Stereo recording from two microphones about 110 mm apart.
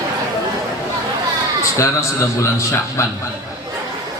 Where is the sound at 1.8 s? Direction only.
25° left (ahead or behind).